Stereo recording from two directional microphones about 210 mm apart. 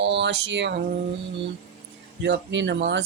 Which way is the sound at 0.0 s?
55° right (ahead or behind).